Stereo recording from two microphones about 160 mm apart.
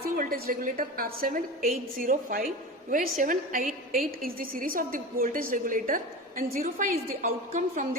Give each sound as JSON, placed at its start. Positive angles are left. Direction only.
{"t": 0.2, "sound": "a woman's voice", "side_deg": -65}